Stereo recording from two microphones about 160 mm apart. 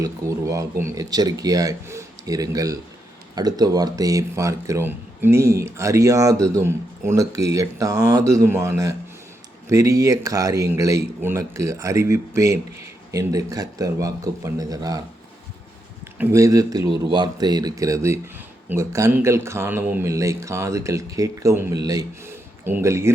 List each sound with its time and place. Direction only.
0.0 s speech: 20° right (ahead or behind)
16.1 s speech: 15° right (ahead or behind)